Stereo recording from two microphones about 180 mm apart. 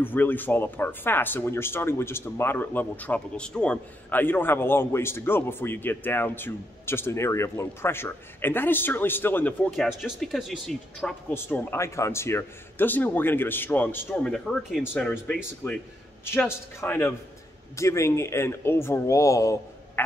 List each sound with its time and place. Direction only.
0.0 s speech: 10° left (ahead or behind)
9.7 s speech: centre (ahead or behind)
11.3 s speech: 15° left (ahead or behind)